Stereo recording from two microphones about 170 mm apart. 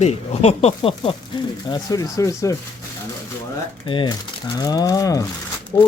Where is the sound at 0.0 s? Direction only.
40° left (ahead or behind).